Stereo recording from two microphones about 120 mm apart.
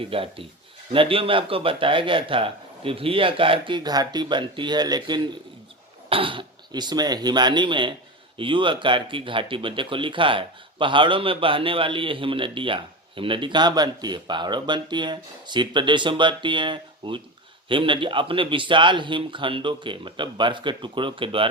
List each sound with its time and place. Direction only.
0.0 s speech: 50° right (ahead or behind)